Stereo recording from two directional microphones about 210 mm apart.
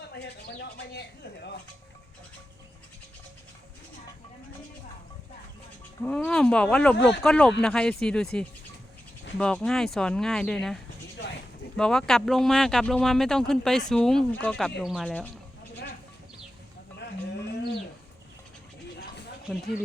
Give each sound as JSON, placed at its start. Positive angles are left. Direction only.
{"t": 0.1, "sound": "speech", "side_deg": 50}
{"t": 6.0, "sound": "speech", "side_deg": 5}
{"t": 11.8, "sound": "speech", "side_deg": 5}
{"t": 17.0, "sound": "livestock", "side_deg": 50}